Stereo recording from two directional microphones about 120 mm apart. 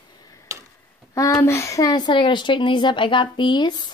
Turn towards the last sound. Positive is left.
turn(degrees=35)  # may be behind; listen again after turning